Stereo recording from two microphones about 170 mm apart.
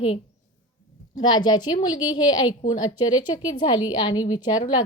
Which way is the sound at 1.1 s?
25° left (ahead or behind).